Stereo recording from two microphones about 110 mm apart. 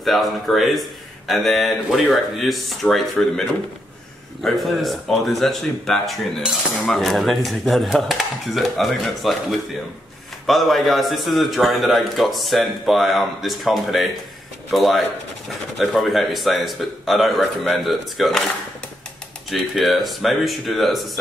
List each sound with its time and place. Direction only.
0.0 s speech: centre (ahead or behind)
19.5 s speech: centre (ahead or behind)